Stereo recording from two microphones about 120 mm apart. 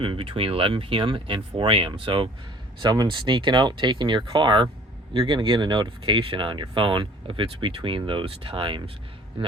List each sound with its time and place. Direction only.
0.0 s speech: 45° right (ahead or behind)